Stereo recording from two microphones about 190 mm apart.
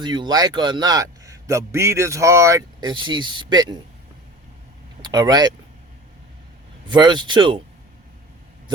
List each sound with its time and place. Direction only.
0.0 s a man's voice: 25° right (ahead or behind)
5.0 s a man's voice: 20° right (ahead or behind)
6.8 s a man's voice: 25° right (ahead or behind)